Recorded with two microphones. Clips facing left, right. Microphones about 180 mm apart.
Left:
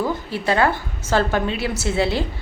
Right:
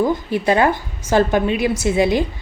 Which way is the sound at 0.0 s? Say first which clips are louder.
Right 5 dB; 15° right (ahead or behind).